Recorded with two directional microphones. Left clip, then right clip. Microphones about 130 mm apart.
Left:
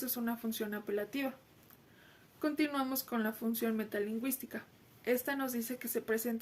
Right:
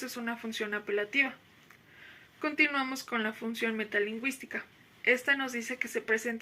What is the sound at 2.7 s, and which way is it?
Speech, 25° left (ahead or behind).